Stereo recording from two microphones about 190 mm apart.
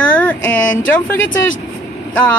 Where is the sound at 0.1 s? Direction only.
5° left (ahead or behind).